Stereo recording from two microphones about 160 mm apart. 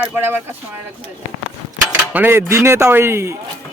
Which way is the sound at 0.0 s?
15° right (ahead or behind).